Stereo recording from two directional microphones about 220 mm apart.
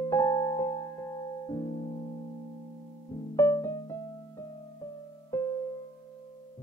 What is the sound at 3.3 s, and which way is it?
Music, 10° left (ahead or behind).